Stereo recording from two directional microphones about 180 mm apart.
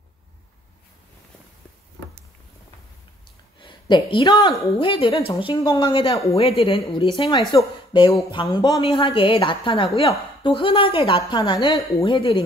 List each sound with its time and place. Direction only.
3.5 s a woman's voice: 25° left (ahead or behind)